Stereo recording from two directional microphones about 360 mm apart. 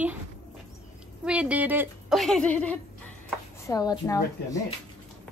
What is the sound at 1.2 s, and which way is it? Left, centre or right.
A woman's voice, centre.